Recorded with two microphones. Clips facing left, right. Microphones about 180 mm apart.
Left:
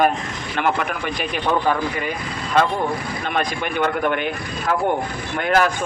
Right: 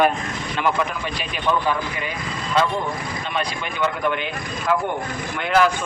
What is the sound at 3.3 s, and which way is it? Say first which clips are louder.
Speech: left 5 dB; 55° left (ahead or behind).